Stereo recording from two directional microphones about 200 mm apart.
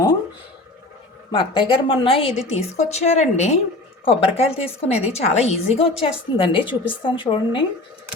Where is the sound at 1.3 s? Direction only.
25° left (ahead or behind).